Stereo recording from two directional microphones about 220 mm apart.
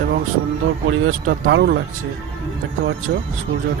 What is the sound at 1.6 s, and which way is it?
Speech, 50° right (ahead or behind).